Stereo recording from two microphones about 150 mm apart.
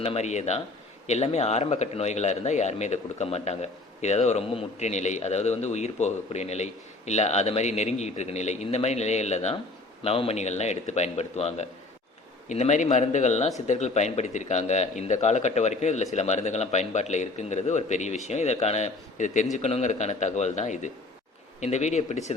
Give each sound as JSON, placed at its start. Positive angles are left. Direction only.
{"t": 0.0, "sound": "a man's voice", "side_deg": 45}